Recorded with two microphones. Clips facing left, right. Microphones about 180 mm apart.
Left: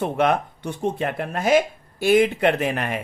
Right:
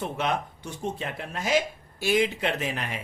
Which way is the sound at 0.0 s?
55° left (ahead or behind).